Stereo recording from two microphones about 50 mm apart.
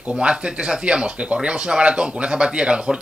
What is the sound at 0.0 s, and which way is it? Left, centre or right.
Speech, centre.